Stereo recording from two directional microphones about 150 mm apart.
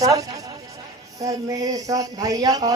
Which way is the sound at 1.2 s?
25° right (ahead or behind).